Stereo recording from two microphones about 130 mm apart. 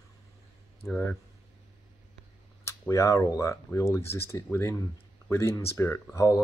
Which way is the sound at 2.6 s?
20° left (ahead or behind).